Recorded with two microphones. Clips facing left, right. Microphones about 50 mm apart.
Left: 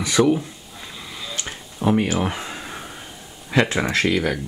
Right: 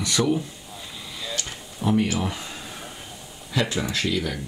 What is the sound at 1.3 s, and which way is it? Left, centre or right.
Tick-tock, left.